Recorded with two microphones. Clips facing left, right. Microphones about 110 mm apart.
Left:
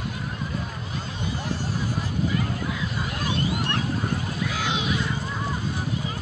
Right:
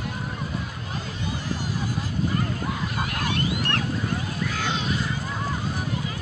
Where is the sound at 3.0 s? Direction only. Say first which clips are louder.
Right 1 dB; 65° right (ahead or behind).